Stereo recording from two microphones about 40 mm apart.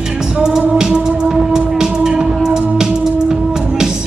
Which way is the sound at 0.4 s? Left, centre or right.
Centre.